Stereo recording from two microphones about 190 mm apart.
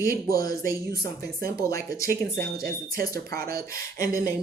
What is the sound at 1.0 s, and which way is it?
Speech, 55° right (ahead or behind).